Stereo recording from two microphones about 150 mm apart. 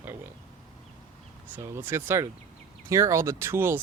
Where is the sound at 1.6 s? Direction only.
15° right (ahead or behind).